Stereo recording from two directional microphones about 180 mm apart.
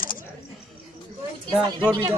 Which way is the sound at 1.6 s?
25° right (ahead or behind).